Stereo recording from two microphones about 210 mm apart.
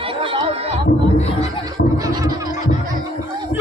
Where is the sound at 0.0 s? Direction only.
25° right (ahead or behind).